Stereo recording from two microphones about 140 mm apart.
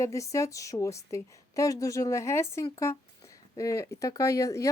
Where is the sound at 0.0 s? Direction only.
20° left (ahead or behind).